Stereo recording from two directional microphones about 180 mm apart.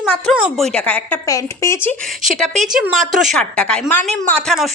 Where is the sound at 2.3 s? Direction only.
Centre (ahead or behind).